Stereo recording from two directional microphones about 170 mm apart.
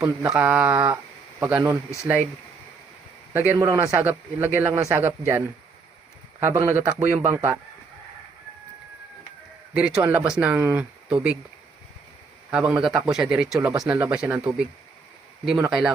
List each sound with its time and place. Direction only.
0.0 s mantra: 20° right (ahead or behind)
0.3 s speech: 5° right (ahead or behind)
3.3 s speech: 10° right (ahead or behind)
6.4 s speech: 15° right (ahead or behind)
9.7 s speech: 5° right (ahead or behind)
12.5 s speech: 5° right (ahead or behind)